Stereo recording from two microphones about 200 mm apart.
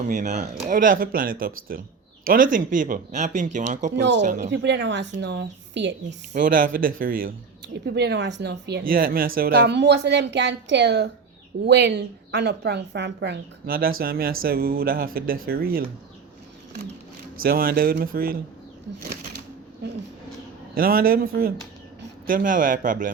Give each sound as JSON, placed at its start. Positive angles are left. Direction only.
{"t": 0.1, "sound": "speech", "side_deg": -40}
{"t": 4.5, "sound": "speech", "side_deg": -60}
{"t": 6.4, "sound": "speech", "side_deg": -45}
{"t": 17.4, "sound": "speech", "side_deg": -45}